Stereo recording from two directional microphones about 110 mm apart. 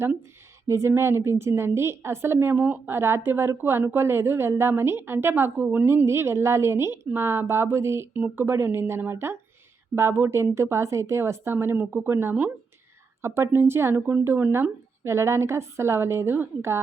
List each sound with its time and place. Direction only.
0.7 s a woman's voice: 25° right (ahead or behind)